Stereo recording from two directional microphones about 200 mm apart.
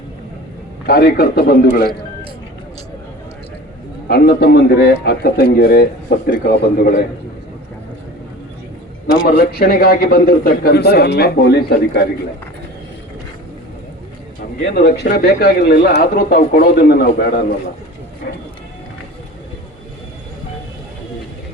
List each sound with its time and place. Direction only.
0.9 s a man's voice: 50° left (ahead or behind)
4.1 s a man's voice: 50° left (ahead or behind)
9.2 s a man's voice: 50° left (ahead or behind)
14.8 s a man's voice: 50° left (ahead or behind)